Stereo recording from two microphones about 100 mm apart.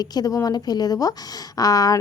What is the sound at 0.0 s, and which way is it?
A woman's voice, 40° left (ahead or behind).